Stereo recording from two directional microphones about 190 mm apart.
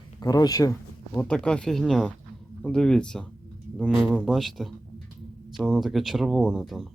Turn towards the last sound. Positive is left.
turn(degrees=0)  # may be behind; listen again after turning